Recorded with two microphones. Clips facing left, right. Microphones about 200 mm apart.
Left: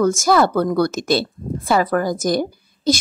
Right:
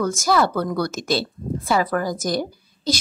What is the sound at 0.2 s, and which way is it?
Speech, 50° left (ahead or behind).